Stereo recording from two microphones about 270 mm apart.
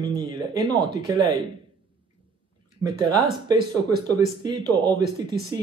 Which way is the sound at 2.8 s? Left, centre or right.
Centre.